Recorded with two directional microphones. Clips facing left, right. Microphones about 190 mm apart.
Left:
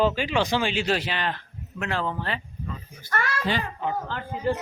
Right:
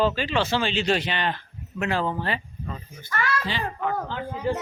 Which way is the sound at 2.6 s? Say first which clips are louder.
Right 1 dB; 40° right (ahead or behind).